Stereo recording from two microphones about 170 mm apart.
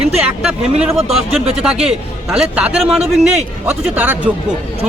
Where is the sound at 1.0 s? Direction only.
40° right (ahead or behind).